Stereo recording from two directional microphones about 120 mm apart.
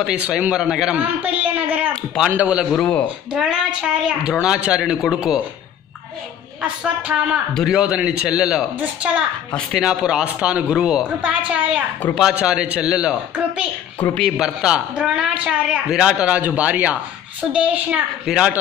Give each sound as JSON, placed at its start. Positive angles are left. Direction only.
{"t": 0.0, "sound": "a woman's voice", "side_deg": -10}
{"t": 2.7, "sound": "a man's voice", "side_deg": 5}
{"t": 3.4, "sound": "a woman's voice", "side_deg": -5}
{"t": 6.6, "sound": "a woman's voice", "side_deg": -10}